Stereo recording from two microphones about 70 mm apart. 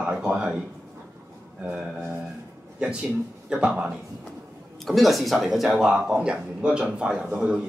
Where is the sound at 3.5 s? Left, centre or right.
Centre.